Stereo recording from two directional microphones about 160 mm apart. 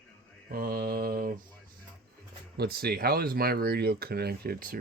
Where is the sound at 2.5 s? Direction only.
85° right.